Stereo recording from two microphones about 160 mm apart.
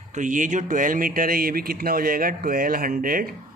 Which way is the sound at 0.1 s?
50° right (ahead or behind).